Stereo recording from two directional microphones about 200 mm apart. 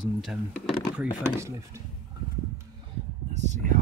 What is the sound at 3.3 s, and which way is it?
Speech, 35° right (ahead or behind).